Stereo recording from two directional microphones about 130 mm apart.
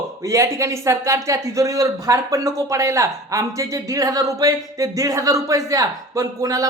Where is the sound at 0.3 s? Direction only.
25° right (ahead or behind).